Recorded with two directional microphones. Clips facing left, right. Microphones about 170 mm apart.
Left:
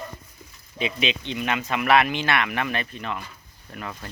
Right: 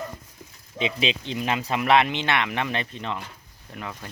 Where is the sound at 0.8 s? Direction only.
30° right (ahead or behind).